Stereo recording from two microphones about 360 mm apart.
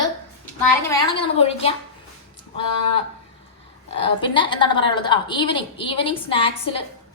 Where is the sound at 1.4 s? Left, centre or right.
Centre.